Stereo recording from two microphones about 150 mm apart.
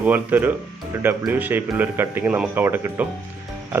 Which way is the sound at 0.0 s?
10° right (ahead or behind).